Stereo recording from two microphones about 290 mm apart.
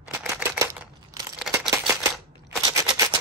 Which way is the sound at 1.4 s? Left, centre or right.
Centre.